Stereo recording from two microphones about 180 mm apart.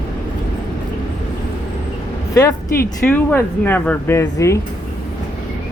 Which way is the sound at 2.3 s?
20° left (ahead or behind).